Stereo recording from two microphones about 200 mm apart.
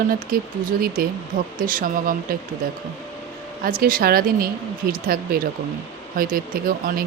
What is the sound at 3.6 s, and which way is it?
Speech, 45° right (ahead or behind).